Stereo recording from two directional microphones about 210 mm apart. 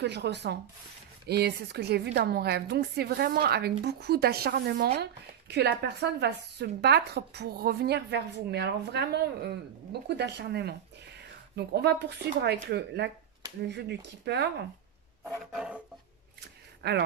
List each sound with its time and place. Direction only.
0.0 s speech: 55° right (ahead or behind)
15.2 s roar: centre (ahead or behind)
16.8 s speech: 45° right (ahead or behind)